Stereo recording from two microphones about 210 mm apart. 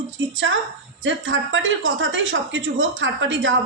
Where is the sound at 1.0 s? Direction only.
65° right (ahead or behind).